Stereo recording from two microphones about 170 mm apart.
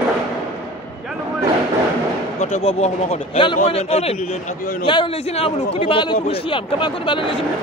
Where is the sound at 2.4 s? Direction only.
40° left (ahead or behind).